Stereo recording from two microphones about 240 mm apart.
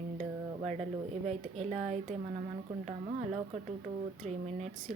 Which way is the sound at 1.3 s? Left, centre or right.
Right.